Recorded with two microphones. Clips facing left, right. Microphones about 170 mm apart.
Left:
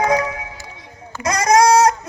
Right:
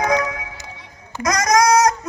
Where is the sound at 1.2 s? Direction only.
30° left (ahead or behind).